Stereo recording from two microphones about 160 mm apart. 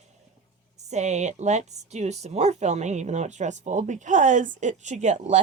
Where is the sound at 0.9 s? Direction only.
45° right (ahead or behind).